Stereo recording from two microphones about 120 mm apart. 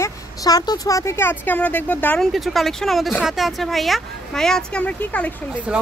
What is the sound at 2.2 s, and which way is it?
Speech, centre (ahead or behind).